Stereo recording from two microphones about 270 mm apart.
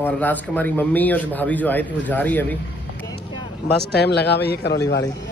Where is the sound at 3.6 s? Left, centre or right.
Left.